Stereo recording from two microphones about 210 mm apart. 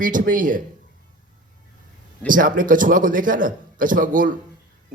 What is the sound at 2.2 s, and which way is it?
A man's voice, 40° right (ahead or behind).